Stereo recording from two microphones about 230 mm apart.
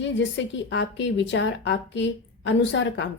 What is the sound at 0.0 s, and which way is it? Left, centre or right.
Speech, left.